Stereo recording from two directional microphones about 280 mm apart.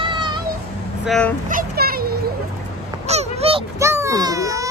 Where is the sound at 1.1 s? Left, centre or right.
Centre.